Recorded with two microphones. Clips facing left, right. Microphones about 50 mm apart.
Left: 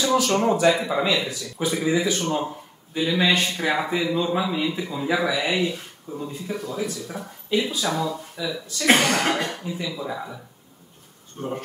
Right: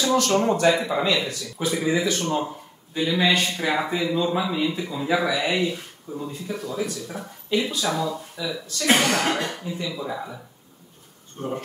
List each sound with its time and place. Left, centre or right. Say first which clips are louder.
0.0 s speech: even; centre